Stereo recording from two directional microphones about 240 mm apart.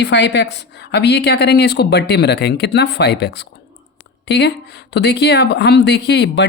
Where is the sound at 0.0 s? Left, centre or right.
Left.